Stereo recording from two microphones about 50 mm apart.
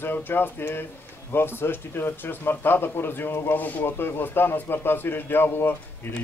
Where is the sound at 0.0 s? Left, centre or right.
Left.